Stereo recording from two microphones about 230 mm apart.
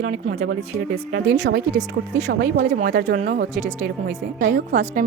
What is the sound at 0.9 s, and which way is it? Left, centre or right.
Speech, right.